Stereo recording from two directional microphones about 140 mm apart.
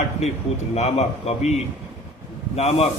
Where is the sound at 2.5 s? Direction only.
45° left (ahead or behind).